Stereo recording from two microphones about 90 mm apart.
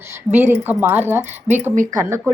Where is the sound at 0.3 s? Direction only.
25° right (ahead or behind).